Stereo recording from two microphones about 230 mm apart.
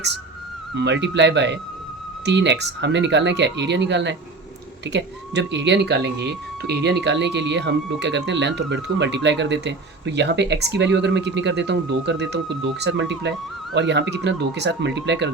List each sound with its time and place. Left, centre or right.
0.7 s speech: right